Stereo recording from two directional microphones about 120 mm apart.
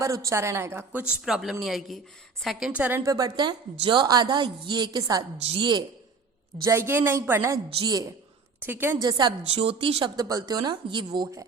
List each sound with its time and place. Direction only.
0.0 s a woman's voice: 25° right (ahead or behind)
1.2 s a woman's voice: 5° right (ahead or behind)
3.0 s a woman's voice: 30° right (ahead or behind)
6.7 s a woman's voice: 20° right (ahead or behind)
8.6 s a woman's voice: 20° right (ahead or behind)
9.0 s a woman's voice: 35° right (ahead or behind)
9.6 s speech: 50° right (ahead or behind)
10.2 s a woman's voice: 35° right (ahead or behind)